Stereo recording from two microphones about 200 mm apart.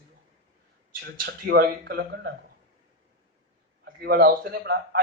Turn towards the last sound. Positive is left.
turn(degrees=-50)  # may be behind; listen again after turning